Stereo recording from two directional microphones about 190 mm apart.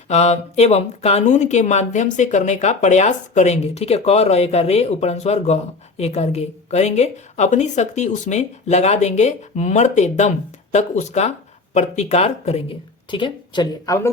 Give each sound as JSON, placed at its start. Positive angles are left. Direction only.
{"t": 0.1, "sound": "a woman's voice", "side_deg": 35}